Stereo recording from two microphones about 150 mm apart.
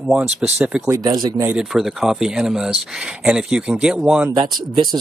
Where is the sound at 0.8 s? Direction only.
25° right (ahead or behind).